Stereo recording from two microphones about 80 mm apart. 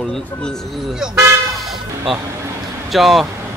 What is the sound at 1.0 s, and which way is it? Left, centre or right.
Vehicle, centre.